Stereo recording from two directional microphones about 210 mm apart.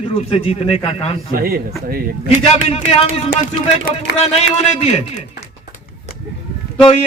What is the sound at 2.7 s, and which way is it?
Speech, 30° left (ahead or behind).